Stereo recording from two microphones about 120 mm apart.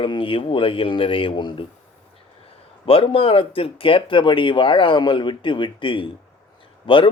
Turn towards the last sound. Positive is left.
turn(degrees=45)  # may be behind; listen again after turning